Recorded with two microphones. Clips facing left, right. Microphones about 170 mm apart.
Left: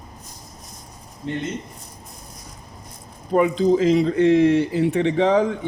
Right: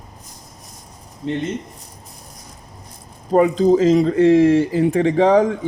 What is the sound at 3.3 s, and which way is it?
Speech, 40° right (ahead or behind).